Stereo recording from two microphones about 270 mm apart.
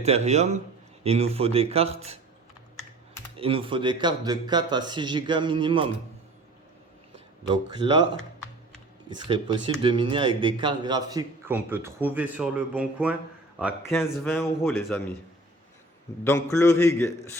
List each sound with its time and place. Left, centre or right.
0.0 s speech: right
3.3 s speech: centre
7.5 s speech: centre
9.0 s a man's voice: centre
16.2 s a man's voice: centre